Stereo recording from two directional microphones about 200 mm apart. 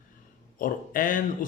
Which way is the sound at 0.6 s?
40° left (ahead or behind).